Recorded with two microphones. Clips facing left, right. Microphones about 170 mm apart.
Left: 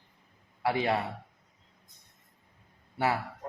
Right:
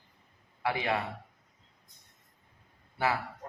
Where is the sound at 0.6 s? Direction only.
35° left (ahead or behind).